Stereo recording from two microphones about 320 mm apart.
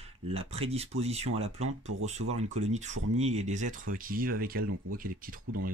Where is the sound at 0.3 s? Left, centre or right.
Centre.